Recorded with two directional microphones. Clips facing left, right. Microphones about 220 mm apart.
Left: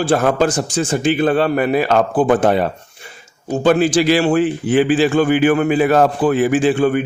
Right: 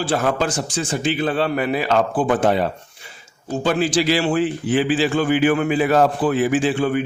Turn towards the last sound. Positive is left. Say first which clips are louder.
# left 4 dB
turn(degrees=50)  # may be behind; listen again after turning